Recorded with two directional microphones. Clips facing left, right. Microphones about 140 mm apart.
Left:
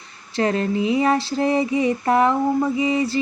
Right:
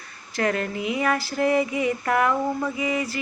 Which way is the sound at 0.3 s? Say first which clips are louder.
Left 5 dB; 30° left (ahead or behind).